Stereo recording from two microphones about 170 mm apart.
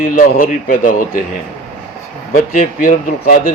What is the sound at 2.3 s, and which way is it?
Speech, 55° left (ahead or behind).